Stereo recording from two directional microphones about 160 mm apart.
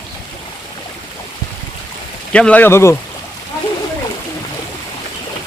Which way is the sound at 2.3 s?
10° left (ahead or behind).